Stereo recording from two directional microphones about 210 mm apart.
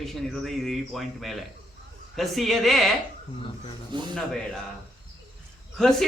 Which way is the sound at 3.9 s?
20° right (ahead or behind).